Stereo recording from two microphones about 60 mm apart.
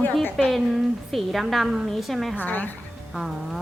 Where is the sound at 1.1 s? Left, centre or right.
Centre.